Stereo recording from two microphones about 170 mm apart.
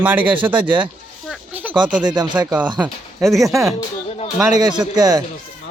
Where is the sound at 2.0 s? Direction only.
25° right (ahead or behind).